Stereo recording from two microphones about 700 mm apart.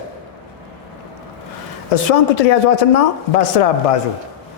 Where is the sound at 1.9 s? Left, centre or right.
Left.